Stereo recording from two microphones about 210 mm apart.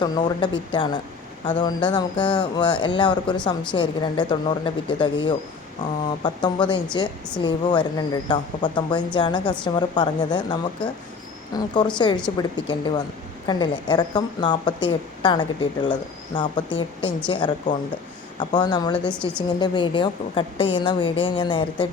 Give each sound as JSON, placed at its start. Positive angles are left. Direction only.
{"t": 0.0, "sound": "a woman's voice", "side_deg": 20}
{"t": 19.0, "sound": "a woman's voice", "side_deg": 5}
{"t": 19.5, "sound": "a woman's voice", "side_deg": 20}